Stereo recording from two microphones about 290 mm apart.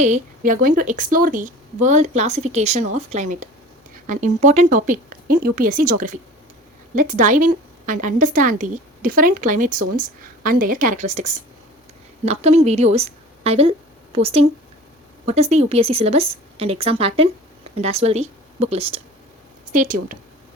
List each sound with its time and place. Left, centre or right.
0.0 s a woman's voice: right